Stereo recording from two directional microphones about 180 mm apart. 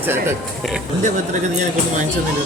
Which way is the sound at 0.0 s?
10° right (ahead or behind).